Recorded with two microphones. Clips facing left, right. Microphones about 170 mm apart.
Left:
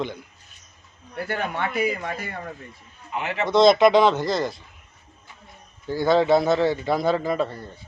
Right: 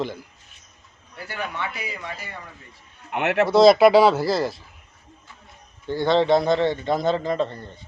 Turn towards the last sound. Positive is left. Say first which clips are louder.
# even
turn(degrees=10)  # may be behind; listen again after turning